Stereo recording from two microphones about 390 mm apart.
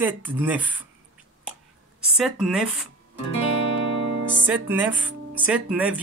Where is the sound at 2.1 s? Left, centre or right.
Centre.